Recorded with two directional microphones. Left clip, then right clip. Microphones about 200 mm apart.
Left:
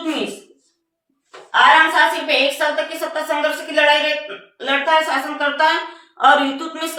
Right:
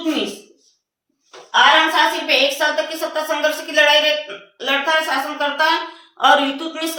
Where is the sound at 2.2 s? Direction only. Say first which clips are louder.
Right 1 dB; centre (ahead or behind).